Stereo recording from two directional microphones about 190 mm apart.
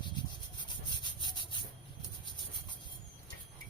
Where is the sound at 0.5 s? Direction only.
25° left (ahead or behind).